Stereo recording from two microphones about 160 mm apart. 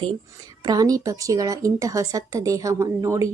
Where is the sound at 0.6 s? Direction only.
25° right (ahead or behind).